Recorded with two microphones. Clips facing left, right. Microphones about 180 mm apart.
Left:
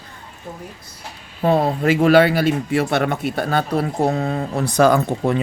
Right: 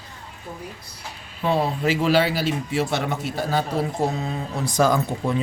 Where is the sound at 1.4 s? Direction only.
55° left (ahead or behind).